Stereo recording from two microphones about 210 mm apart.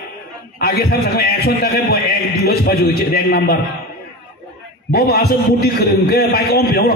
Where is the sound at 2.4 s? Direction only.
50° left (ahead or behind).